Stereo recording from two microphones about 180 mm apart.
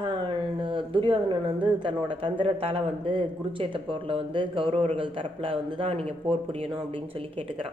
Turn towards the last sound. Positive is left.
turn(degrees=-30)  # may be behind; listen again after turning